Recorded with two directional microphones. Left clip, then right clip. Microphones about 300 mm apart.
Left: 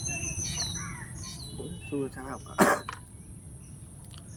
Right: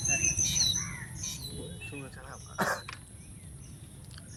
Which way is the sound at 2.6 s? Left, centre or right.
Left.